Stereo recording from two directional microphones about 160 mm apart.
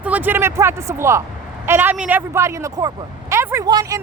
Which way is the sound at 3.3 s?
15° right (ahead or behind).